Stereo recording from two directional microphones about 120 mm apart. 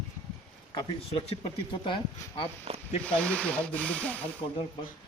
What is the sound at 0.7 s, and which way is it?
Speech, 50° left (ahead or behind).